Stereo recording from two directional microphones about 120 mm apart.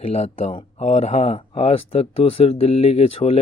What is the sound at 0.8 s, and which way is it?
Speech, 70° left (ahead or behind).